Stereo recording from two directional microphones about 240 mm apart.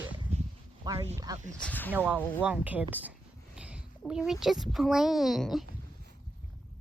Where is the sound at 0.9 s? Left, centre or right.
Centre.